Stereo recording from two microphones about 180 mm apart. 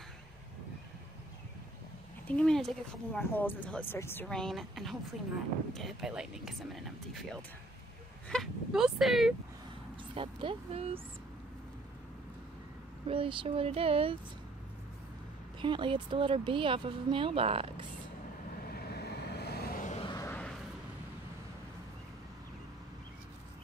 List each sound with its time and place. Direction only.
2.2 s speech: 5° left (ahead or behind)
8.3 s speech: centre (ahead or behind)
10.1 s speech: 30° right (ahead or behind)
13.0 s speech: 30° right (ahead or behind)
15.6 s speech: 25° right (ahead or behind)
18.7 s vehicle: 60° left (ahead or behind)
20.0 s a sound: 25° left (ahead or behind)
20.2 s a sound: 5° left (ahead or behind)